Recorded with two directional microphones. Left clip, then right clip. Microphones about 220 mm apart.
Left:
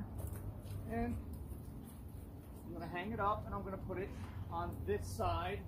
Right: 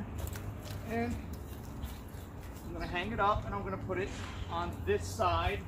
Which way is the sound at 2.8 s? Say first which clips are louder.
Right 7 dB; centre (ahead or behind).